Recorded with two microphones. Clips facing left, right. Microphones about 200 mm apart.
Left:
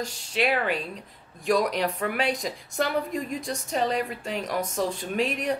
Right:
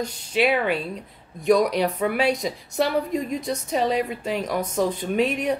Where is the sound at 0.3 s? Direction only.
Centre (ahead or behind).